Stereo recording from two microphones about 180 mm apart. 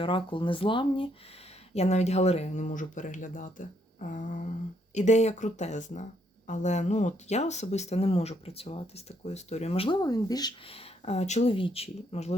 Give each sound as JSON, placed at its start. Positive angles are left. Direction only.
{"t": 0.0, "sound": "speech", "side_deg": 30}